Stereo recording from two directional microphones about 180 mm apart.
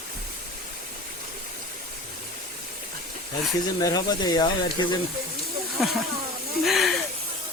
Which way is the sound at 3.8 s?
20° left (ahead or behind).